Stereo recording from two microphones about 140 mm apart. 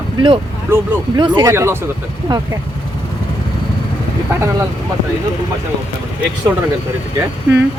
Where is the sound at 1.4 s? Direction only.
20° right (ahead or behind).